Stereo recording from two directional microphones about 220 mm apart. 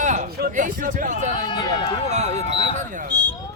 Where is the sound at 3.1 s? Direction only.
20° right (ahead or behind).